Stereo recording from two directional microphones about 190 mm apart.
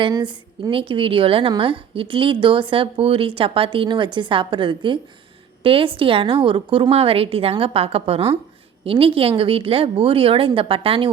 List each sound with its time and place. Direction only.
0.0 s a woman's voice: 25° right (ahead or behind)